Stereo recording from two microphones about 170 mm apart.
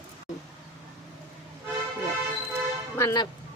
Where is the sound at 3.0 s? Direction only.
15° left (ahead or behind).